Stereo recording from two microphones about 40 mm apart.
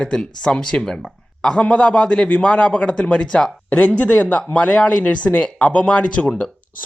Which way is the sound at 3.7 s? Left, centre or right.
Left.